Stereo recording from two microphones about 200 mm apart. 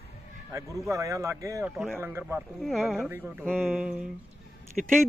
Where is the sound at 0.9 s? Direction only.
15° right (ahead or behind).